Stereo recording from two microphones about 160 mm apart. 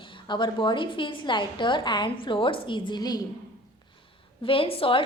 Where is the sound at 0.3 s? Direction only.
30° left (ahead or behind).